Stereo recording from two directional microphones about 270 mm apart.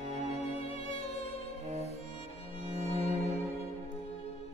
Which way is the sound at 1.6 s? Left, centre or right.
Right.